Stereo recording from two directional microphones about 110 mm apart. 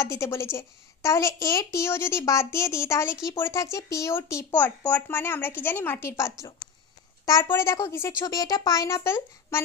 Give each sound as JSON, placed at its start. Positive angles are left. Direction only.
{"t": 0.0, "sound": "a child's voice", "side_deg": 25}
{"t": 7.2, "sound": "a woman's voice", "side_deg": 35}